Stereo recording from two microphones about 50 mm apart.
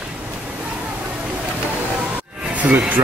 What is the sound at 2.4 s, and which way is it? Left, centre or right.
Music, right.